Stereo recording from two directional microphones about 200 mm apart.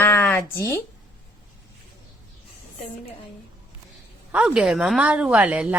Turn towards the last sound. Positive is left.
turn(degrees=-5)  # may be behind; listen again after turning